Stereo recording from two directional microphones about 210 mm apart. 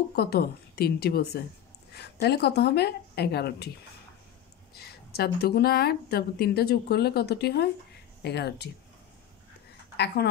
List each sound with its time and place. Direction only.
0.1 s speech: 50° left (ahead or behind)
4.7 s speech: 50° left (ahead or behind)
9.9 s speech: 50° left (ahead or behind)